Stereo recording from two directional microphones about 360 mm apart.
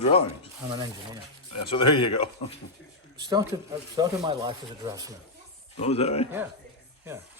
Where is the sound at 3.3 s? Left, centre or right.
Centre.